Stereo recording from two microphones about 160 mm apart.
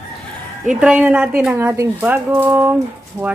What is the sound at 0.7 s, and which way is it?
A woman's voice, 5° right (ahead or behind).